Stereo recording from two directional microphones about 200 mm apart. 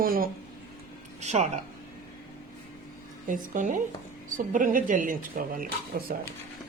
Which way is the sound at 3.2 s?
40° right (ahead or behind).